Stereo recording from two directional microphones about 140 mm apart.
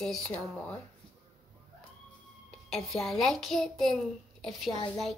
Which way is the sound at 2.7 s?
5° left (ahead or behind).